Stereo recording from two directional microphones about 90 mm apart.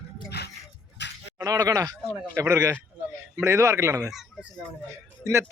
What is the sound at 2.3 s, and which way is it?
Speech, 35° right (ahead or behind).